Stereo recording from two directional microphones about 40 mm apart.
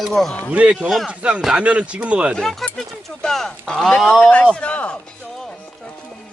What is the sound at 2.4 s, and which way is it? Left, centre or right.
Speech, centre.